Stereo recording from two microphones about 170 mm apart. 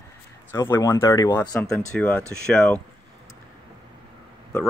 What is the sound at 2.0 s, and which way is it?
Speech, 5° left (ahead or behind).